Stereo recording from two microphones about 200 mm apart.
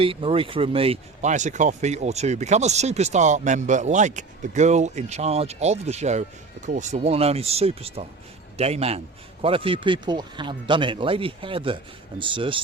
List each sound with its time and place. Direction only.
0.0 s speech: 25° right (ahead or behind)